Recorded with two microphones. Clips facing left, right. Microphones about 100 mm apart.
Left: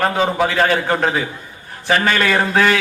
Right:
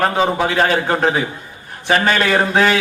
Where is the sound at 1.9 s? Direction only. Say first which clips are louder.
Right 1 dB; 30° right (ahead or behind).